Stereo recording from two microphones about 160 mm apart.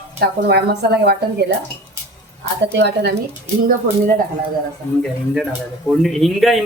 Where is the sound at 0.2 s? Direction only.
85° right.